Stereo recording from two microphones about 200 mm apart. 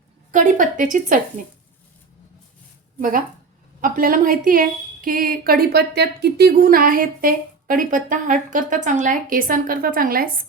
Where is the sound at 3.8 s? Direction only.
45° right (ahead or behind).